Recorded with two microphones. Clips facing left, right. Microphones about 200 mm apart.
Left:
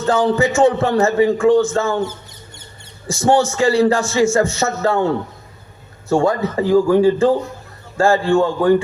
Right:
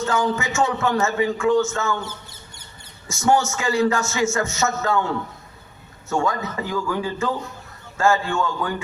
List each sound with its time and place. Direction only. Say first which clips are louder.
0.0 s a man's voice: left 7 dB; 35° left (ahead or behind)
3.1 s a man's voice: left 4 dB; 35° left (ahead or behind)
6.1 s a man's voice: left 7 dB; 35° left (ahead or behind)